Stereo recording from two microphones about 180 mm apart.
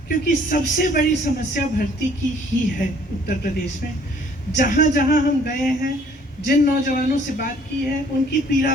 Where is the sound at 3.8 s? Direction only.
60° left (ahead or behind).